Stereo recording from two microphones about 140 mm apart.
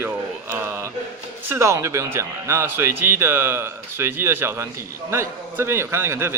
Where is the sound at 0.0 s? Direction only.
15° right (ahead or behind).